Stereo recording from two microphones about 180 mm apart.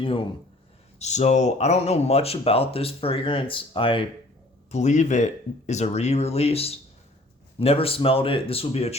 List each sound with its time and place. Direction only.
0.9 s speech: 40° left (ahead or behind)
4.7 s speech: 40° left (ahead or behind)